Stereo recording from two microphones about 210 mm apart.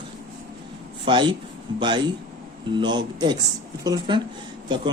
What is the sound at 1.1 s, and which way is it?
Speech, 25° right (ahead or behind).